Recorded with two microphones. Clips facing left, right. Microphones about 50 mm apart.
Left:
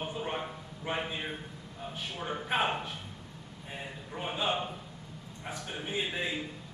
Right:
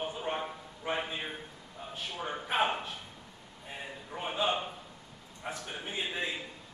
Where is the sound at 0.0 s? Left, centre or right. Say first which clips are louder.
Right 1 dB; centre.